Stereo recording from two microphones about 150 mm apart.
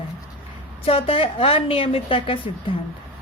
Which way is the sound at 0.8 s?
40° left (ahead or behind).